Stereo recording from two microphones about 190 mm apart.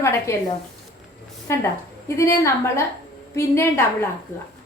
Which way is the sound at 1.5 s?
15° left (ahead or behind).